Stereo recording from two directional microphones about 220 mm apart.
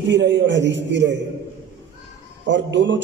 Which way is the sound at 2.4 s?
55° right (ahead or behind).